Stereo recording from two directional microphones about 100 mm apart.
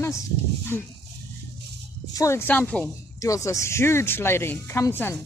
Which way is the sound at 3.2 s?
35° left (ahead or behind).